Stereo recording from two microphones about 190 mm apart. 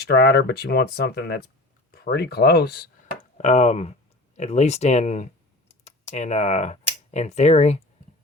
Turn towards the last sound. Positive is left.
turn(degrees=35)  # may be behind; listen again after turning